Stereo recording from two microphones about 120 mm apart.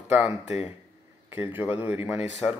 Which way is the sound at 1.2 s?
15° right (ahead or behind).